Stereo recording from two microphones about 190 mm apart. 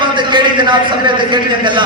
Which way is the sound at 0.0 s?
25° right (ahead or behind).